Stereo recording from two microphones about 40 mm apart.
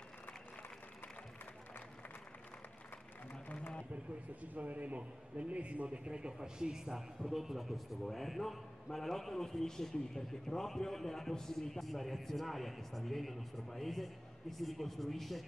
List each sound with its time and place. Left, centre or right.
4.4 s a man's voice: right; by 15.4 s centre